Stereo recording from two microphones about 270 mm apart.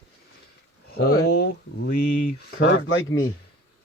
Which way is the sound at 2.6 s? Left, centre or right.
Left.